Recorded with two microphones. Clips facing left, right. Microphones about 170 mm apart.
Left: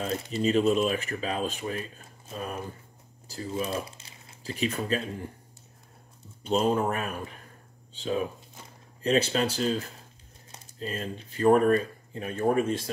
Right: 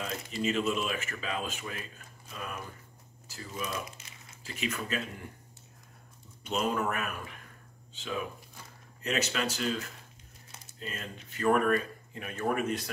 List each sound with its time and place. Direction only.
0.0 s speech: 35° left (ahead or behind)
6.4 s speech: 30° left (ahead or behind)